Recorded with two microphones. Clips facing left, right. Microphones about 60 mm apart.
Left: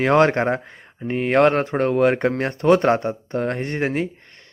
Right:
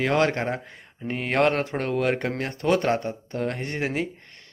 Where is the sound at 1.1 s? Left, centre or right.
Centre.